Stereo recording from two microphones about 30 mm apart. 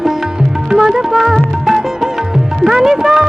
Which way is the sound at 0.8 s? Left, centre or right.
Centre.